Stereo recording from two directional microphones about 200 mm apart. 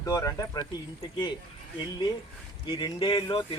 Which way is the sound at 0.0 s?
15° left (ahead or behind).